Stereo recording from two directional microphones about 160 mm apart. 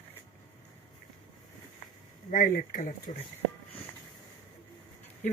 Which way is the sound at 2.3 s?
55° left (ahead or behind).